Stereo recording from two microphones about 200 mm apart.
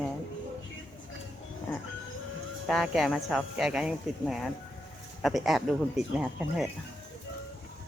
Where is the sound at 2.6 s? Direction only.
Centre (ahead or behind).